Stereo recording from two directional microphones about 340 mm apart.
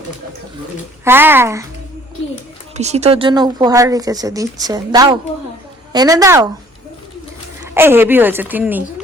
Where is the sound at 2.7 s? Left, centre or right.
Centre.